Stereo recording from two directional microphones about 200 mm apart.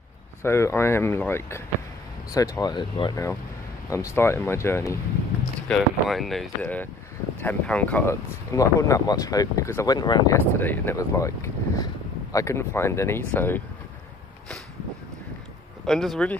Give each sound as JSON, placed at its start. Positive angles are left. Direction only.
{"t": 0.4, "sound": "speech", "side_deg": 15}
{"t": 5.7, "sound": "speech", "side_deg": 0}
{"t": 10.6, "sound": "speech", "side_deg": 10}
{"t": 15.8, "sound": "speech", "side_deg": 0}